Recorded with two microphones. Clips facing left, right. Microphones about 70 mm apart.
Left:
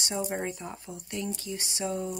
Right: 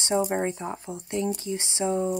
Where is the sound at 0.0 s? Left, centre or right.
Right.